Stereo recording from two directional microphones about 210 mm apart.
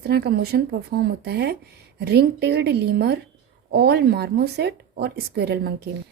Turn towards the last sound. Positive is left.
turn(degrees=-50)  # may be behind; listen again after turning